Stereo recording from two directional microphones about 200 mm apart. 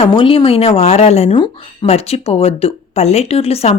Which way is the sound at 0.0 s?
25° left (ahead or behind).